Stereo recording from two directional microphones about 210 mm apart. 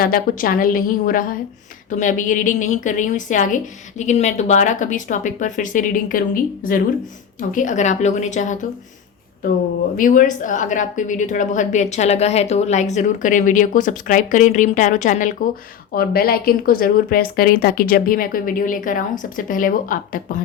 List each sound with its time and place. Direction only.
0.0 s a woman's voice: 45° left (ahead or behind)
10.0 s a woman's voice: 40° left (ahead or behind)